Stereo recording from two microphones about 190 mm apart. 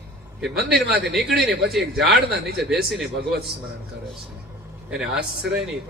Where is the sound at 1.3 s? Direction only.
60° right (ahead or behind).